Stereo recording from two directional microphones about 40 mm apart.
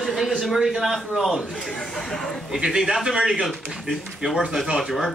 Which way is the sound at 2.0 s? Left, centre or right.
Centre.